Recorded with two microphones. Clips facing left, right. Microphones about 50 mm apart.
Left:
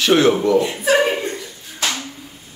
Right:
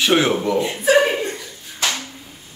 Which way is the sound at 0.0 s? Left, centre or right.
Centre.